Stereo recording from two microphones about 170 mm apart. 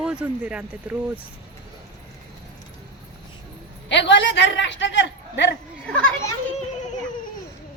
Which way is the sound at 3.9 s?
90° left.